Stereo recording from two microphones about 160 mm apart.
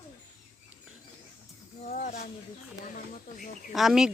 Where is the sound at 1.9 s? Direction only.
55° left (ahead or behind).